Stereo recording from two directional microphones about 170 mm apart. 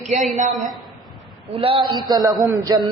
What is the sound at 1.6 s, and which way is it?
A man's voice, 30° right (ahead or behind).